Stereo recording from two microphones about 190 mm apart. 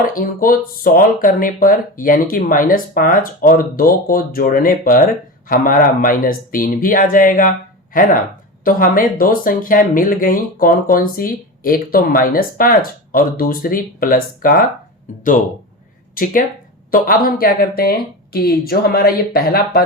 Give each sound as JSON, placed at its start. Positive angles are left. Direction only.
{"t": 0.0, "sound": "speech", "side_deg": 45}
{"t": 8.6, "sound": "speech", "side_deg": 50}
{"t": 16.2, "sound": "speech", "side_deg": 50}